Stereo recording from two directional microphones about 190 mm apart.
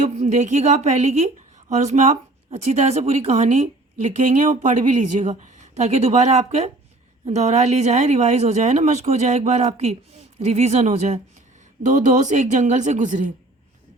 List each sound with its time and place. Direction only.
0.0 s speech: 40° right (ahead or behind)